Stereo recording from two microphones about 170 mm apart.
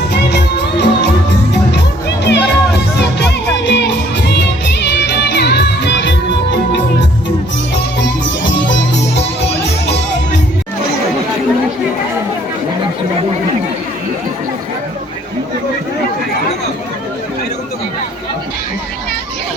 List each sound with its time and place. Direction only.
0.1 s music: 80° left
2.2 s music: 80° left
8.4 s music: 90° left